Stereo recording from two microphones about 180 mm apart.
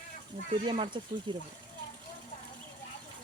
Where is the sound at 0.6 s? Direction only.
25° right (ahead or behind).